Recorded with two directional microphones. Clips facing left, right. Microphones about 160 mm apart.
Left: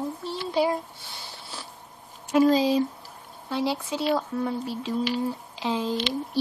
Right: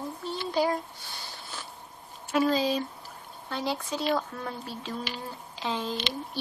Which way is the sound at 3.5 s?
5° left (ahead or behind).